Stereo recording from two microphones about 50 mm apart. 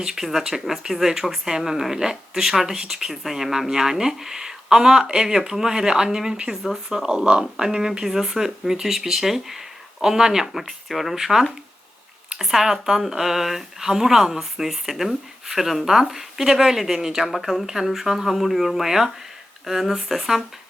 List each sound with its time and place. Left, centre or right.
0.0 s speech: centre